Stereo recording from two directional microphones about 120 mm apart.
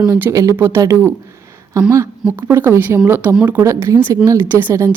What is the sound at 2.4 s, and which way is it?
Speech, 20° right (ahead or behind).